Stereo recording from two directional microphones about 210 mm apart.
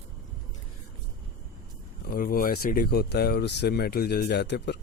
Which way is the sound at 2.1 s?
45° left (ahead or behind).